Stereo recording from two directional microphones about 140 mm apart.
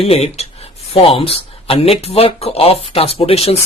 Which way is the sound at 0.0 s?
45° left (ahead or behind).